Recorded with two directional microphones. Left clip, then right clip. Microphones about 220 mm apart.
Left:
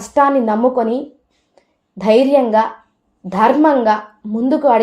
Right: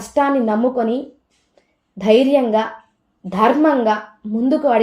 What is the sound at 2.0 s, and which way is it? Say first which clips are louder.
Speech: left 2 dB; 30° left (ahead or behind).